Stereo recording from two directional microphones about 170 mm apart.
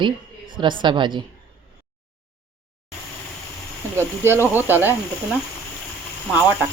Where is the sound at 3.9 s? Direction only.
15° right (ahead or behind).